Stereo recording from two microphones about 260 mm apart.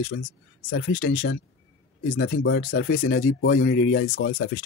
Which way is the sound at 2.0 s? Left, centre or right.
Left.